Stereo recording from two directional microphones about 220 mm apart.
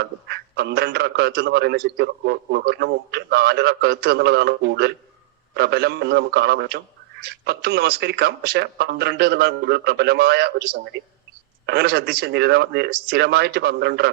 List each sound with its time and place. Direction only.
0.0 s a man's voice: 50° right (ahead or behind)